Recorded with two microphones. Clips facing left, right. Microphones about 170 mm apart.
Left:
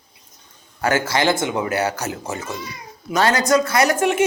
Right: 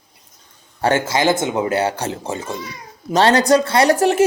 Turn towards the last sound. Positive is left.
turn(degrees=-35)  # may be behind; listen again after turning